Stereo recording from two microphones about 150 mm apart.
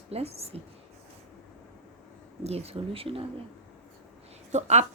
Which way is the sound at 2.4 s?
45° right (ahead or behind).